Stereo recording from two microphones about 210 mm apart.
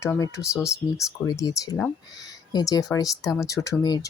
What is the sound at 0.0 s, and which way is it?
Speech, 15° left (ahead or behind).